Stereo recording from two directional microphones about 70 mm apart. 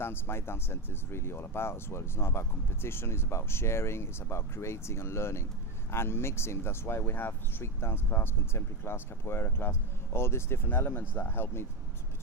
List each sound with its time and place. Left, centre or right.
0.0 s speech: left